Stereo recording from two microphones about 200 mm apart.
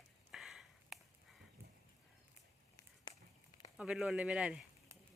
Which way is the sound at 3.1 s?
25° left (ahead or behind).